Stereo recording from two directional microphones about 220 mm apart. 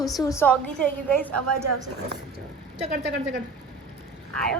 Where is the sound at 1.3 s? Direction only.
90° right.